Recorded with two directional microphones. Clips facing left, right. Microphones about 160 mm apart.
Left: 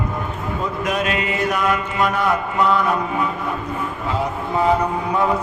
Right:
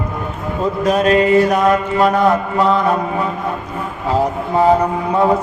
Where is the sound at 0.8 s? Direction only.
35° right (ahead or behind).